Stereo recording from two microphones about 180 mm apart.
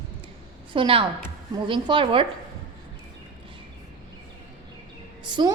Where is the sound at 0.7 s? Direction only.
30° right (ahead or behind).